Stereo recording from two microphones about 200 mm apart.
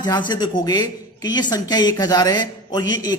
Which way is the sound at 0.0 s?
20° left (ahead or behind).